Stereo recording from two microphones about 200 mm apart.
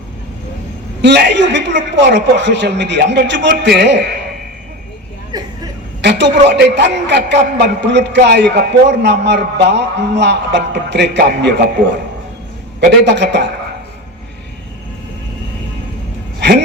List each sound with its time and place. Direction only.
1.0 s a man's voice: 60° right (ahead or behind)
5.3 s a sound: 20° right (ahead or behind)
6.0 s a man's voice: 60° right (ahead or behind)
13.1 s a man's voice: 60° right (ahead or behind)
16.4 s speech: 60° right (ahead or behind)